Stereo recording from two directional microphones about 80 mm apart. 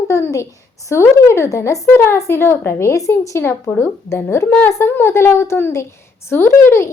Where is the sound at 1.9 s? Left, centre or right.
Left.